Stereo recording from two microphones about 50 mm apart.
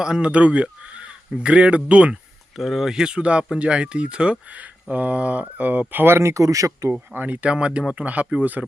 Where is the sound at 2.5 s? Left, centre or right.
Centre; by 6.1 s right.